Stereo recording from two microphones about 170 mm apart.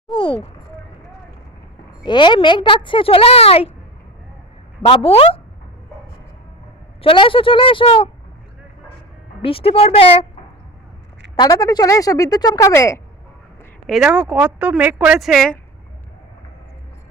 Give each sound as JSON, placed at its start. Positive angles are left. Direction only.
{"t": 0.1, "sound": "a sound", "side_deg": 30}
{"t": 2.0, "sound": "speech", "side_deg": 25}
{"t": 4.8, "sound": "speech", "side_deg": 30}
{"t": 7.0, "sound": "speech", "side_deg": 30}
{"t": 9.4, "sound": "speech", "side_deg": 35}
{"t": 11.3, "sound": "speech", "side_deg": 20}
{"t": 13.8, "sound": "speech", "side_deg": 0}